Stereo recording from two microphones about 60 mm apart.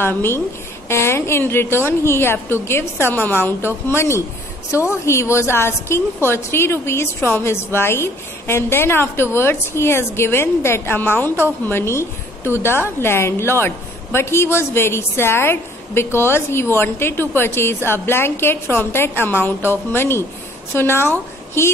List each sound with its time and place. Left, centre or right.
0.0 s a woman's voice: left